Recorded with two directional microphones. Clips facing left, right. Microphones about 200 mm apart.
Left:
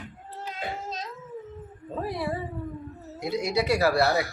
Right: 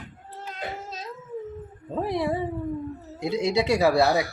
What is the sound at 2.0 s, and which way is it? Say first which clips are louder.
Speech: right 5 dB; 20° right (ahead or behind).